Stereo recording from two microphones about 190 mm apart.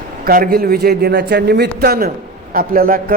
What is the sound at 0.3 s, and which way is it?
A man's voice, 50° right (ahead or behind).